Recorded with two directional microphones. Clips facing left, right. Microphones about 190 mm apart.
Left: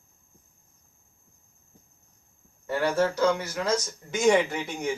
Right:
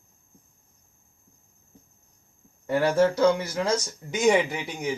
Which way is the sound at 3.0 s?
10° right (ahead or behind).